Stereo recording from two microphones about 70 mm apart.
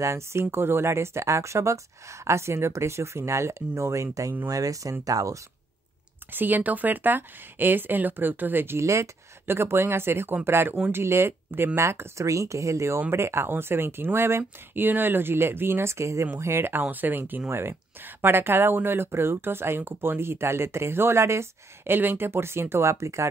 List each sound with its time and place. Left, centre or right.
0.0 s speech: right
6.3 s speech: right